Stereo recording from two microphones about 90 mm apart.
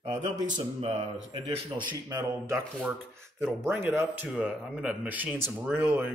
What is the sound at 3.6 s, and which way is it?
Speech, 25° right (ahead or behind).